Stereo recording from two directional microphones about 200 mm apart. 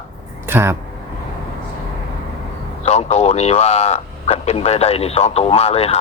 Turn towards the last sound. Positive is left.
turn(degrees=30)  # may be behind; listen again after turning